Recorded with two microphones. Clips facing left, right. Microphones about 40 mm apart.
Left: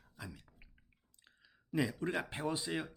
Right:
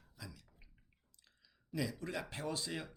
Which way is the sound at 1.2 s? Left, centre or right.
Left.